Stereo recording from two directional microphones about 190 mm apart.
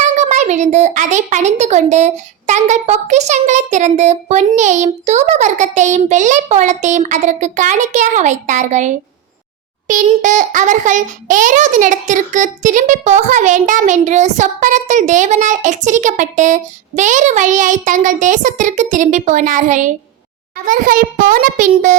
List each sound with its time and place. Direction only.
0.0 s a child's voice: 40° right (ahead or behind)
10.2 s a child's voice: 40° right (ahead or behind)